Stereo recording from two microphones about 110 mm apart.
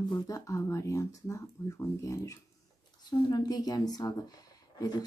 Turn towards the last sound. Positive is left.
turn(degrees=35)  # may be behind; listen again after turning